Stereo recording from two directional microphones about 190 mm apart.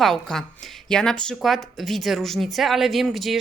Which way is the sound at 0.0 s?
5° left (ahead or behind).